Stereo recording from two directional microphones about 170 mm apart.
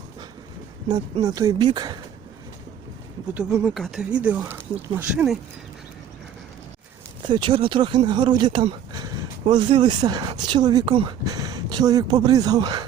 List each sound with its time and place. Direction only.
1.2 s speech: 20° right (ahead or behind)
3.3 s speech: 5° right (ahead or behind)
7.3 s speech: 30° right (ahead or behind)